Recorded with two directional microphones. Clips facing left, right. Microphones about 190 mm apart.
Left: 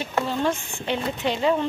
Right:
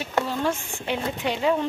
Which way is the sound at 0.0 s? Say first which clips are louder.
Left 1 dB; 10° right (ahead or behind).